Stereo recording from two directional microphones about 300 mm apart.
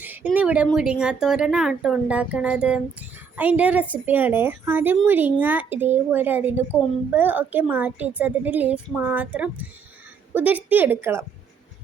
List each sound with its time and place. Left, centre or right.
0.0 s speech: centre